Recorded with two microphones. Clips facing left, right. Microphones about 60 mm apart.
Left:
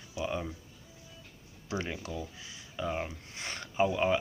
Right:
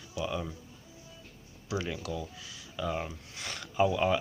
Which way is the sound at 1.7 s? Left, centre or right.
Left.